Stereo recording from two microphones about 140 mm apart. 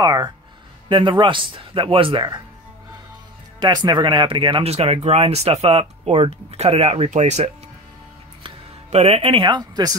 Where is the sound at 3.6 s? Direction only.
30° right (ahead or behind).